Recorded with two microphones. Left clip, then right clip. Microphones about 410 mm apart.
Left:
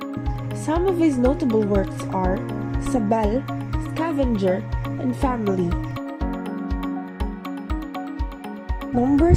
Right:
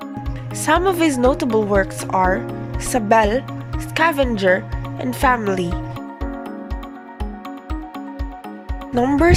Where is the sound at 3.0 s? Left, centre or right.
Right.